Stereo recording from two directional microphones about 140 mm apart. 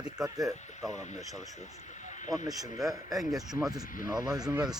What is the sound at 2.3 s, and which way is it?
Speech, centre (ahead or behind).